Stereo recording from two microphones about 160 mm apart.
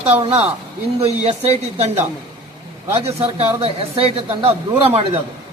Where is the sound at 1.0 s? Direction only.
40° right (ahead or behind).